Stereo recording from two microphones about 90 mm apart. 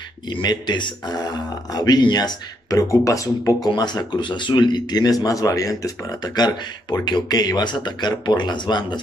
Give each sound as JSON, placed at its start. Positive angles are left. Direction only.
{"t": 0.3, "sound": "speech", "side_deg": 55}